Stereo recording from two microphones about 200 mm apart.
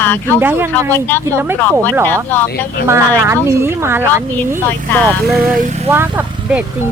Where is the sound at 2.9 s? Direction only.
10° right (ahead or behind).